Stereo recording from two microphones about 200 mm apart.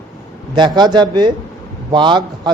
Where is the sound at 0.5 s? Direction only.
20° right (ahead or behind).